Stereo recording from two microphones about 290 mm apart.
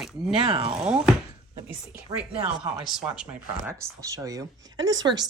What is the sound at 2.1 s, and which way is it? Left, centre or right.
Speech, centre.